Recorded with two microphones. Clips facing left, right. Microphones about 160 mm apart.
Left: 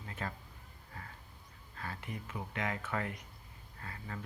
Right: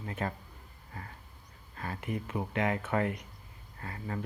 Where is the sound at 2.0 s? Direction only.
50° right (ahead or behind).